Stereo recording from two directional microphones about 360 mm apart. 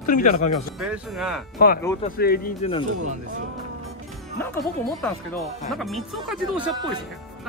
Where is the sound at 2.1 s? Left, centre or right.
Left.